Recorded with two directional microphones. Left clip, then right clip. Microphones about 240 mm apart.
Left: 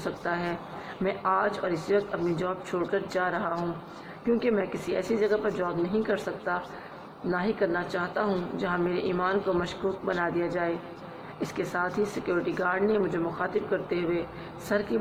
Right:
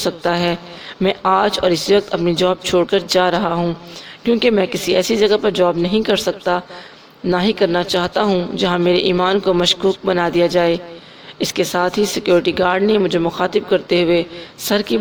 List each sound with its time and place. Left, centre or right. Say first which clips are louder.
0.0 s a woman's voice: right 13 dB; right